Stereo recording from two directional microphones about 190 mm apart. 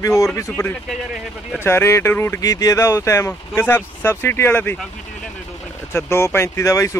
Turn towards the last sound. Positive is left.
turn(degrees=15)  # may be behind; listen again after turning